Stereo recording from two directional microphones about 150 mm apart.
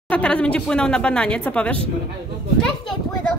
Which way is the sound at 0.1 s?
10° left (ahead or behind).